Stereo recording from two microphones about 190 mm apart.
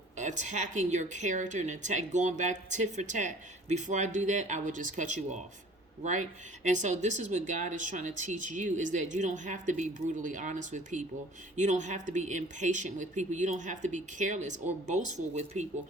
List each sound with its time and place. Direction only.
0.2 s a woman's voice: 40° right (ahead or behind)